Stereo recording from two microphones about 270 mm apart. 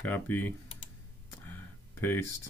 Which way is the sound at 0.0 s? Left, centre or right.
Centre.